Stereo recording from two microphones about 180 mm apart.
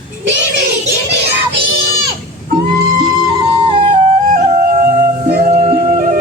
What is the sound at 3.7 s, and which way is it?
Music, 30° right (ahead or behind).